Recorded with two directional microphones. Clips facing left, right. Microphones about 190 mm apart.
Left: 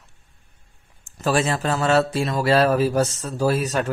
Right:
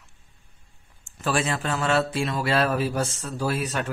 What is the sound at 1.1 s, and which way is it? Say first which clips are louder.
Speech: left 4 dB; 40° left (ahead or behind).